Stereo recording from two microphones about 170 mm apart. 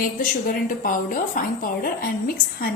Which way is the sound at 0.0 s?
55° left (ahead or behind).